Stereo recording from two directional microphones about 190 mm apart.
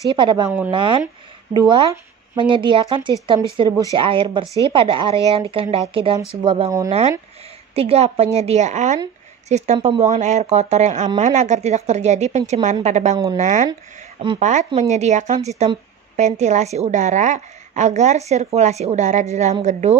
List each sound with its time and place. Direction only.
0.1 s speech: 25° right (ahead or behind)
3.9 s speech: 30° right (ahead or behind)
7.7 s a woman's voice: 30° right (ahead or behind)